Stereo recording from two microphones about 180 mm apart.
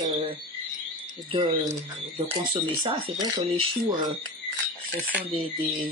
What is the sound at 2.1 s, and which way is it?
Speech, 30° right (ahead or behind).